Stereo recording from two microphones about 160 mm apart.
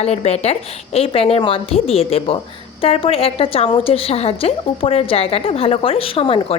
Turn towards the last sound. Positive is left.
turn(degrees=35)  # may be behind; listen again after turning